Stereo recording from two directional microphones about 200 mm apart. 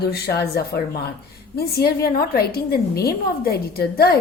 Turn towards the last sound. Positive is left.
turn(degrees=50)  # may be behind; listen again after turning